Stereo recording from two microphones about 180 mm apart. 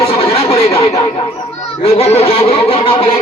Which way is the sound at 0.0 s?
35° left (ahead or behind).